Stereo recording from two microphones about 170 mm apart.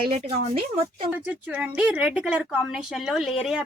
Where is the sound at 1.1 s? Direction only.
5° right (ahead or behind).